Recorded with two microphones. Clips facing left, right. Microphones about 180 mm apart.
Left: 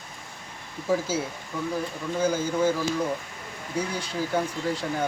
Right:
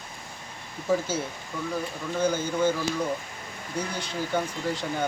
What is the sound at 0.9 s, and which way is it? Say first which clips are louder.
Speech: even; 5° left (ahead or behind).